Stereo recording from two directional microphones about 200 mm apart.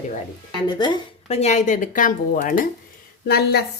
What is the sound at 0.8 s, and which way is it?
Speech, 20° left (ahead or behind).